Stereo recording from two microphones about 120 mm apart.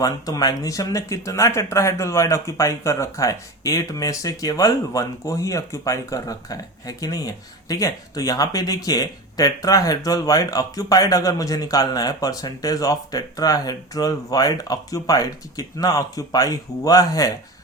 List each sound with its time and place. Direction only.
0.0 s speech: 30° left (ahead or behind)